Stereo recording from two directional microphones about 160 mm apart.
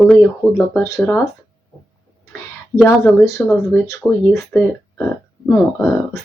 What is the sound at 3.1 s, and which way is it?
Speech, 15° left (ahead or behind).